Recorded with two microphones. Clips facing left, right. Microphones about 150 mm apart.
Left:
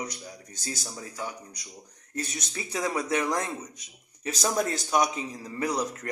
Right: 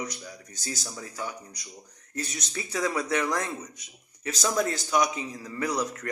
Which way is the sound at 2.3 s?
25° left (ahead or behind).